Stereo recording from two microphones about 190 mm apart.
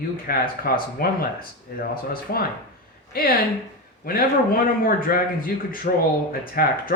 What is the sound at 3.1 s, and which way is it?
Speech, 50° left (ahead or behind).